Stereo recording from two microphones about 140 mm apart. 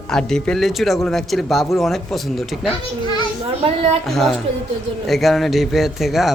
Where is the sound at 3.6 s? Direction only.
45° right (ahead or behind).